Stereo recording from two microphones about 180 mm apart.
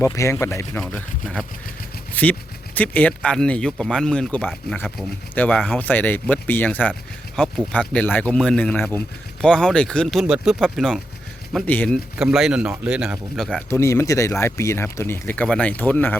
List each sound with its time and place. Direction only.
0.0 s speech: 15° left (ahead or behind)
1.2 s speech: centre (ahead or behind)
12.1 s speech: centre (ahead or behind)
13.7 s speech: 15° left (ahead or behind)